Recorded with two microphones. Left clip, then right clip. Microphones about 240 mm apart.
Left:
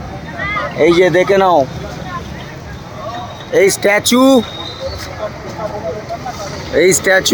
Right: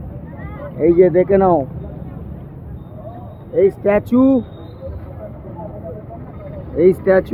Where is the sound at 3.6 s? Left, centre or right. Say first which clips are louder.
Left 3 dB; left.